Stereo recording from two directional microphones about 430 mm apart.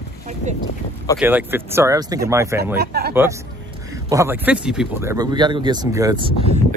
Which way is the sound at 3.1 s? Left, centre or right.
Centre.